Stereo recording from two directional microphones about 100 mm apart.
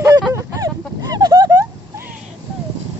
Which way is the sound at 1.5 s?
25° right (ahead or behind).